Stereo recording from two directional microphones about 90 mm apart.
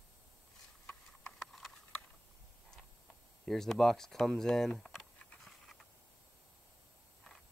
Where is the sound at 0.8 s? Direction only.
5° left (ahead or behind).